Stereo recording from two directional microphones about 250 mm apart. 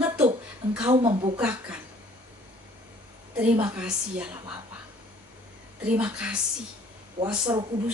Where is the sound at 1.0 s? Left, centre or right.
Right.